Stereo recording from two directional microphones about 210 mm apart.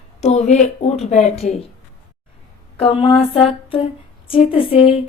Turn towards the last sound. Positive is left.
turn(degrees=25)  # may be behind; listen again after turning